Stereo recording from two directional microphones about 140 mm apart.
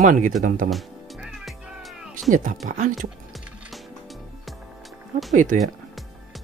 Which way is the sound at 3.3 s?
Centre (ahead or behind).